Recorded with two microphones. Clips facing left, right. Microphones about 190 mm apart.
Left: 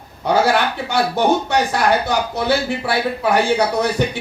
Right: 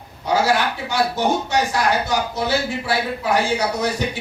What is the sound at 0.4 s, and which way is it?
Speech, 60° left (ahead or behind).